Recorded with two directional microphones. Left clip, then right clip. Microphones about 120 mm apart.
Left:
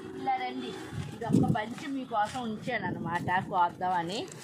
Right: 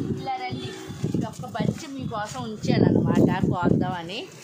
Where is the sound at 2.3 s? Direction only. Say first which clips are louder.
Right 7 dB; 30° right (ahead or behind).